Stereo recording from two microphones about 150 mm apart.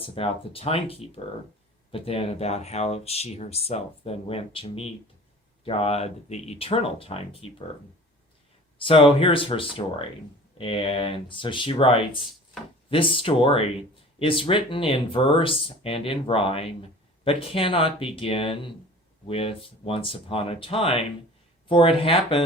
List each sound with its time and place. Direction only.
0.0 s speech: 40° left (ahead or behind)
8.8 s speech: 35° left (ahead or behind)